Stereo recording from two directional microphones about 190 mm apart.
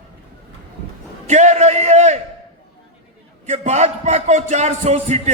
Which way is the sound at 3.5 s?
35° right (ahead or behind).